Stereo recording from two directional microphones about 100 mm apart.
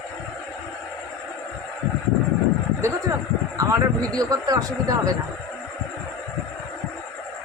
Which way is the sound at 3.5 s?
35° right (ahead or behind).